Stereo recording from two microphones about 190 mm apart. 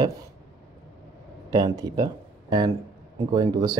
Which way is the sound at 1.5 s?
20° right (ahead or behind).